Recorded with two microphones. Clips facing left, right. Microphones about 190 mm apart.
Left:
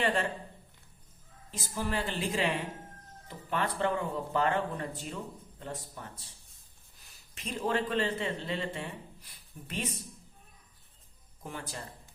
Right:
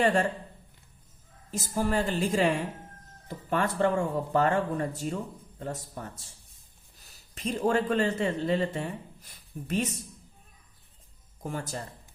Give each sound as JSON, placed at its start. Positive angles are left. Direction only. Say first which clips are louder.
{"t": 0.0, "sound": "speech", "louder": "right 5 dB", "side_deg": -45}
{"t": 1.5, "sound": "a man's voice", "louder": "right 6 dB", "side_deg": -45}
{"t": 11.4, "sound": "speech", "louder": "right 6 dB", "side_deg": -45}